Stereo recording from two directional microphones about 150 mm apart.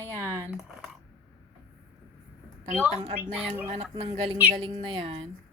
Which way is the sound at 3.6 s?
40° right (ahead or behind).